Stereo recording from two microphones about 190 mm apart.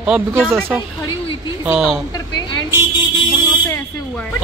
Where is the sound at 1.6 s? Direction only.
10° right (ahead or behind).